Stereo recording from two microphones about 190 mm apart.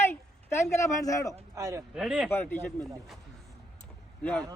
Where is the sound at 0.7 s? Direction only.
15° left (ahead or behind).